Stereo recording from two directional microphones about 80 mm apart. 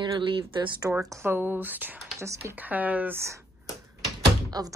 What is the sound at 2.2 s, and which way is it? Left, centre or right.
Speech, right.